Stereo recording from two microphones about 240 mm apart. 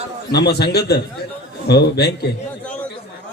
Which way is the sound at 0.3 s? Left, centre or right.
Left.